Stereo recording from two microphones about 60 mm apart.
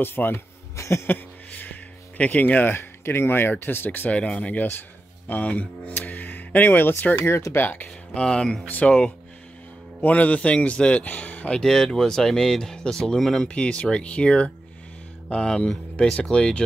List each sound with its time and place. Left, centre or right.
0.0 s speech: left
0.7 s a sound: left
1.5 s speech: left
4.2 s a man's voice: left
8.1 s a man's voice: centre
11.6 s speech: centre
13.5 s a man's voice: centre